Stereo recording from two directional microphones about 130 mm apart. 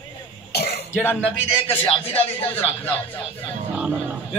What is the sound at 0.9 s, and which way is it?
Speech, 15° left (ahead or behind).